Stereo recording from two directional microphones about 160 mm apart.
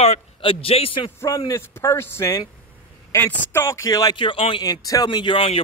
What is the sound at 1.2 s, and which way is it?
A man's voice, 20° left (ahead or behind).